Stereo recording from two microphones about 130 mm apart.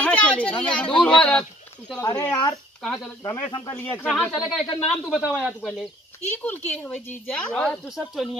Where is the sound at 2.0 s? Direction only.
25° left (ahead or behind).